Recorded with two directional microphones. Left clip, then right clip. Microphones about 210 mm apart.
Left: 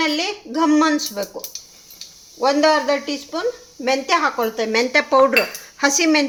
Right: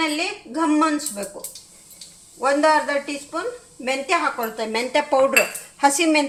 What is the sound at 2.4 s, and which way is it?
Speech, 35° left (ahead or behind).